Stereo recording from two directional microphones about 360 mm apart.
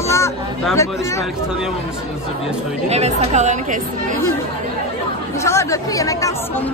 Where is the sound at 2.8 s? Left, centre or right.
Centre.